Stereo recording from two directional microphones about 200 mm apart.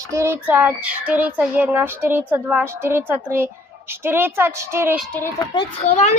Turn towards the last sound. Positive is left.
turn(degrees=35)  # may be behind; listen again after turning